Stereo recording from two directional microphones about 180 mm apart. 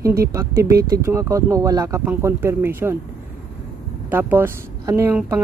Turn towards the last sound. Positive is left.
turn(degrees=-10)  # may be behind; listen again after turning